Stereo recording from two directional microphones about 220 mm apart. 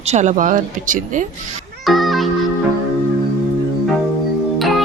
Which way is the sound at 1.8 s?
Centre (ahead or behind).